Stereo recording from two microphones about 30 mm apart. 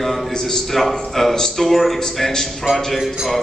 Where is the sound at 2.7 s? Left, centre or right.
Right.